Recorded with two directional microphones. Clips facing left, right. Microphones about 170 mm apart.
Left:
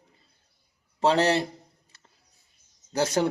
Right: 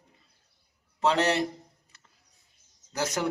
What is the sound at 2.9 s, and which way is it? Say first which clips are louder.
Speech: left 6 dB; 30° left (ahead or behind).